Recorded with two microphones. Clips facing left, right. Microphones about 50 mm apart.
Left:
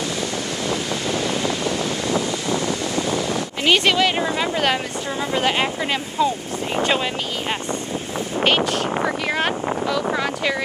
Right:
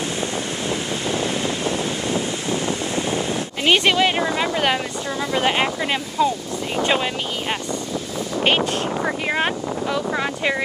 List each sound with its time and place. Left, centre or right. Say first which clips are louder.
0.7 s wind noise: left 1 dB; right
4.0 s speech: right 1 dB; right
4.4 s speech: even; centre
5.3 s speech: right 1 dB; right
8.5 s speech: even; right
9.4 s a sound: left 1 dB; centre